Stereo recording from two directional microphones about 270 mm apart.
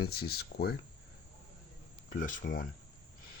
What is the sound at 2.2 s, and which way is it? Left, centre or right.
Speech, left.